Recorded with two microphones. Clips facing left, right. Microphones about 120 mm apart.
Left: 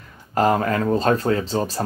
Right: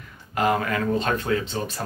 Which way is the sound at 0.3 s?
35° left (ahead or behind).